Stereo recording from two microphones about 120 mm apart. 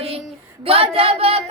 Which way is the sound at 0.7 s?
55° right (ahead or behind).